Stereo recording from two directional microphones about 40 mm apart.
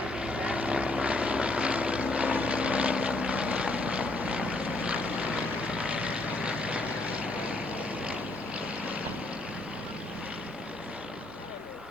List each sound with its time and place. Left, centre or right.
0.2 s vehicle: right